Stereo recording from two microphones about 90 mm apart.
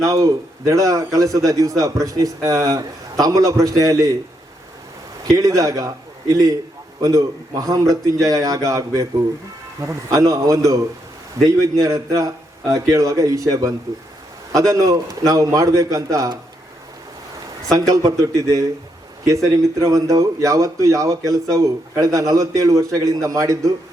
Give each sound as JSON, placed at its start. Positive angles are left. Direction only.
{"t": 0.0, "sound": "a man's voice", "side_deg": -40}
{"t": 5.2, "sound": "a man's voice", "side_deg": -40}
{"t": 17.7, "sound": "a man's voice", "side_deg": -40}
{"t": 19.8, "sound": "a man's voice", "side_deg": -40}